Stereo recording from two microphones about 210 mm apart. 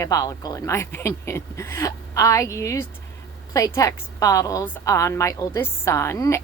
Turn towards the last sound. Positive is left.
turn(degrees=15)  # may be behind; listen again after turning